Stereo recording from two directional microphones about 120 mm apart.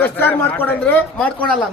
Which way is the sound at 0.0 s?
15° left (ahead or behind).